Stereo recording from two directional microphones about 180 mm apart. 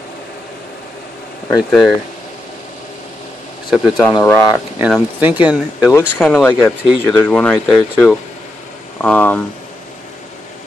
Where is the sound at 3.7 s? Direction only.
5° right (ahead or behind).